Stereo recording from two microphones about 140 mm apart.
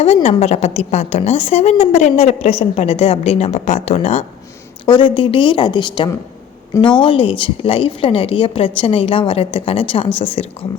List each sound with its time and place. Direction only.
0.0 s a woman's voice: 45° left (ahead or behind)
4.9 s a woman's voice: 35° left (ahead or behind)